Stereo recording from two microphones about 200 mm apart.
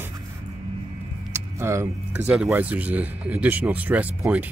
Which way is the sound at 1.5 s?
15° right (ahead or behind).